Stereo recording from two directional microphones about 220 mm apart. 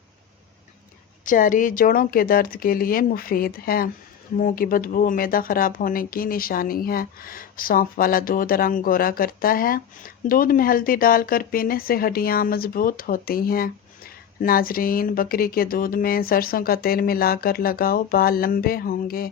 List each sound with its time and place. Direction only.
1.2 s speech: 35° left (ahead or behind)